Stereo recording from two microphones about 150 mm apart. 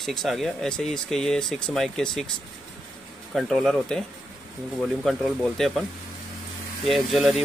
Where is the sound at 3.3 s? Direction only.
5° left (ahead or behind).